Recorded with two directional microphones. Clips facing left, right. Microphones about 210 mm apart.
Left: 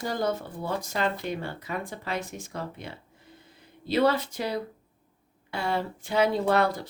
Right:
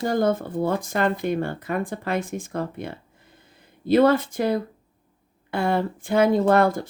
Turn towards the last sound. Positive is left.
turn(degrees=-50)  # may be behind; listen again after turning